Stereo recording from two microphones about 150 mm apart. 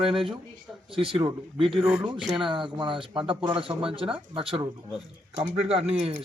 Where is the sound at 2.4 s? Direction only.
30° right (ahead or behind).